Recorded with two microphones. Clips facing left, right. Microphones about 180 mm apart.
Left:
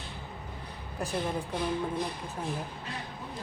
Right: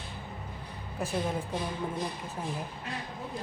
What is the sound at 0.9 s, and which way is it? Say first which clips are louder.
Speech: even; centre (ahead or behind).